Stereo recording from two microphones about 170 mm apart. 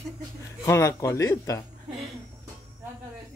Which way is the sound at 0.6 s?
15° left (ahead or behind).